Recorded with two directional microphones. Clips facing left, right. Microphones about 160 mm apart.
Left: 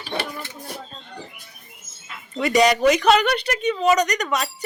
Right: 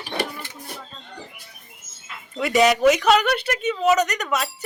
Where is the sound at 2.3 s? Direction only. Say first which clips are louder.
Left 1 dB; centre (ahead or behind).